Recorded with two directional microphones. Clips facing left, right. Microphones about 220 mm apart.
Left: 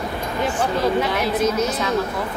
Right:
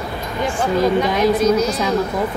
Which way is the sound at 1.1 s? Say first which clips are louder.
Right 5 dB; 5° left (ahead or behind).